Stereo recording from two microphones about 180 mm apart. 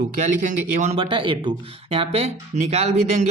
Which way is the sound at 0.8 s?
40° right (ahead or behind).